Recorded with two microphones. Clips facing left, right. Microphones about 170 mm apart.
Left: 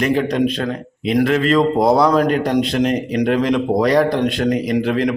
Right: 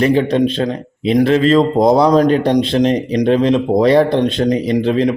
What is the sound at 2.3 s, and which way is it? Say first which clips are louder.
Speech: right 4 dB; 30° right (ahead or behind).